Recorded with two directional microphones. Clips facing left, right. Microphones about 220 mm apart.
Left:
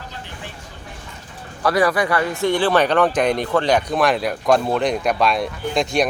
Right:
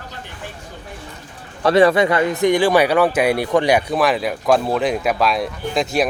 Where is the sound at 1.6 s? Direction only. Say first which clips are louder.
Right 5 dB; 25° right (ahead or behind).